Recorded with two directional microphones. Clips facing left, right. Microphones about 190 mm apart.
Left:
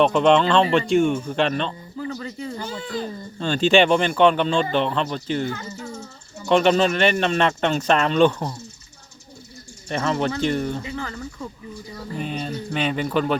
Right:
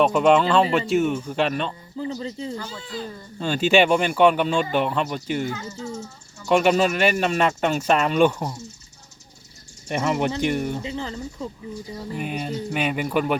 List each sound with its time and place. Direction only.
0.0 s speech: 5° right (ahead or behind)
2.0 s speech: 20° right (ahead or behind)
3.3 s speech: 5° right (ahead or behind)
5.8 s speech: 60° left (ahead or behind)
6.5 s speech: 10° right (ahead or behind)
9.9 s speech: 10° right (ahead or behind)